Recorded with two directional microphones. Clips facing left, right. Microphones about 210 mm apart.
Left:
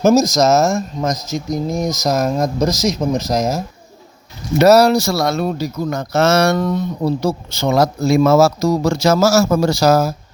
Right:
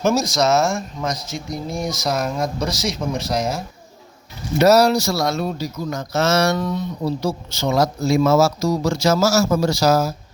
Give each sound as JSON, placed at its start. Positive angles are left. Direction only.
{"t": 0.0, "sound": "speech", "side_deg": 40}
{"t": 4.6, "sound": "speech", "side_deg": 65}